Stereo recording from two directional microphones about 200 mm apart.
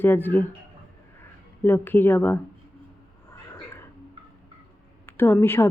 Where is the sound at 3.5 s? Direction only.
10° left (ahead or behind).